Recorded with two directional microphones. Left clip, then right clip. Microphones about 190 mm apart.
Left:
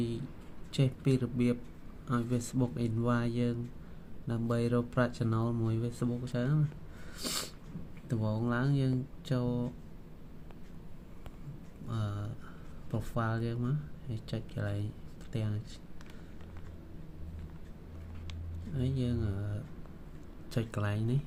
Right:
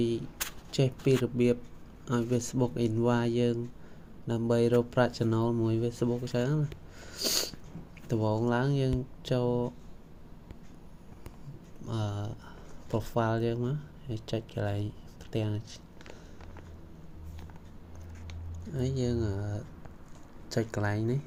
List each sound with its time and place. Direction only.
0.7 s speech: 10° right (ahead or behind)
7.1 s cat: 10° right (ahead or behind)
8.0 s speech: 15° right (ahead or behind)
11.9 s speech: 15° right (ahead or behind)
18.8 s speech: 10° right (ahead or behind)
20.5 s speech: centre (ahead or behind)